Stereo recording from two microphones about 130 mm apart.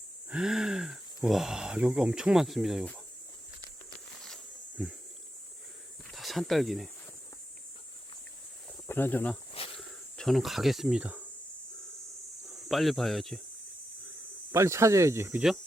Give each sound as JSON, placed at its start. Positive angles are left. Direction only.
{"t": 0.3, "sound": "speech", "side_deg": -5}
{"t": 4.8, "sound": "speech", "side_deg": -5}
{"t": 6.1, "sound": "speech", "side_deg": 0}
{"t": 8.9, "sound": "speech", "side_deg": 15}
{"t": 9.7, "sound": "cricket", "side_deg": 0}
{"t": 12.5, "sound": "speech", "side_deg": 0}
{"t": 14.5, "sound": "speech", "side_deg": -20}